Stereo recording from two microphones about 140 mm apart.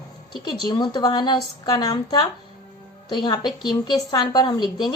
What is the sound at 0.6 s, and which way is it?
A woman's voice, 30° left (ahead or behind).